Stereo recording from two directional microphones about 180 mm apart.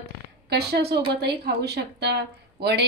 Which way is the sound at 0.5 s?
65° right (ahead or behind).